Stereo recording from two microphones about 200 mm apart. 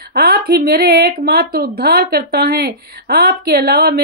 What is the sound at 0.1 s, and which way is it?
Speech, 50° right (ahead or behind).